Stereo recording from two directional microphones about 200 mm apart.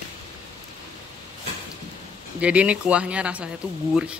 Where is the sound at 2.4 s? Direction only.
5° right (ahead or behind).